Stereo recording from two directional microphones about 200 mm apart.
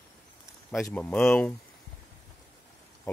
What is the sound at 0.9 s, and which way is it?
Speech, 5° left (ahead or behind).